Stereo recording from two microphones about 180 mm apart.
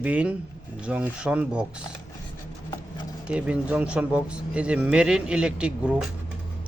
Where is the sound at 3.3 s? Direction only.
5° right (ahead or behind).